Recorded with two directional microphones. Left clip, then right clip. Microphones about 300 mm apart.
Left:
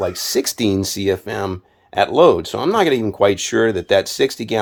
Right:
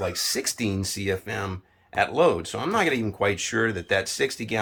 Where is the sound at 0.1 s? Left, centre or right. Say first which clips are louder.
Left 7 dB; left.